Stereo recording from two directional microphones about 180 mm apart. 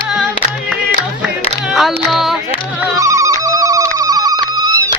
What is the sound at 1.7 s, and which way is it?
Music, centre (ahead or behind).